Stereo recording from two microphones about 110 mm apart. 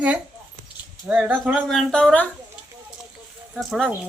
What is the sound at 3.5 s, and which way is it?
Speech, centre (ahead or behind).